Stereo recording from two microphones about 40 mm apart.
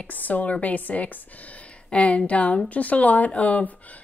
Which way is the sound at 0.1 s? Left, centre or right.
Left.